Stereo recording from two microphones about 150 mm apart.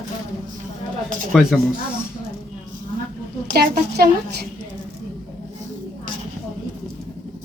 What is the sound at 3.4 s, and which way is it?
Speech, 80° right.